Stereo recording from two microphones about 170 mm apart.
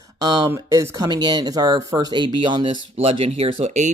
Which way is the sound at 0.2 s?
25° right (ahead or behind).